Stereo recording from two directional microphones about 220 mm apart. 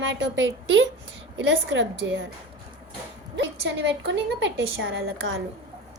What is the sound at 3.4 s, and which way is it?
A woman's voice, 55° right (ahead or behind).